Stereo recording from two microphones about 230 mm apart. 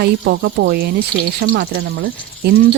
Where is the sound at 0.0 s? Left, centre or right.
Right.